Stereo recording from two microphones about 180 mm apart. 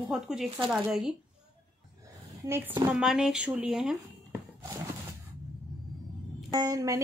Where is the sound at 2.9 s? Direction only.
5° right (ahead or behind).